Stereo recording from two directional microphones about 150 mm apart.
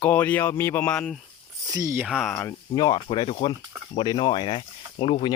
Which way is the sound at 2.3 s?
10° left (ahead or behind).